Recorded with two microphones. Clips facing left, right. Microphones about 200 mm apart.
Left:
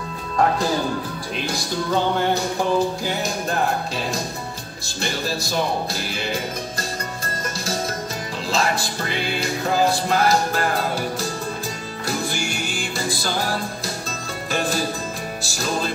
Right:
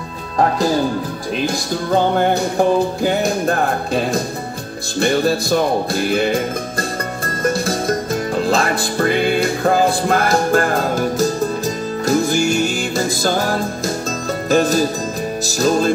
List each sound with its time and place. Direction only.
2.1 s music: 55° right (ahead or behind)